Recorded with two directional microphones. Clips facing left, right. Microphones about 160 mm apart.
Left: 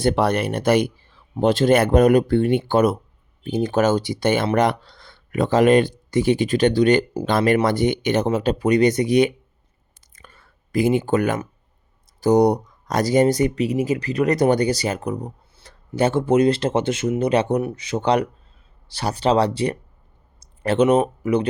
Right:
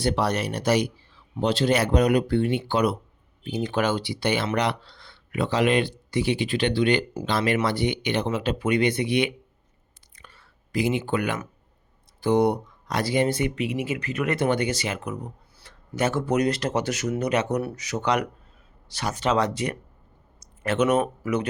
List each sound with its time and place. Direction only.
0.0 s speech: 55° left (ahead or behind)
10.2 s whispering: 50° left (ahead or behind)
12.2 s speech: 40° left (ahead or behind)